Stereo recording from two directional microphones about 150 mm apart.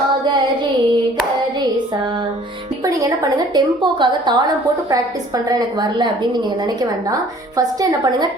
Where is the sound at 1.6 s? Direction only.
30° right (ahead or behind).